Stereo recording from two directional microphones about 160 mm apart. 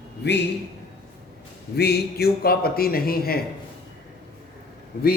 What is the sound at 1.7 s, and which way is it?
A man's voice, 85° left.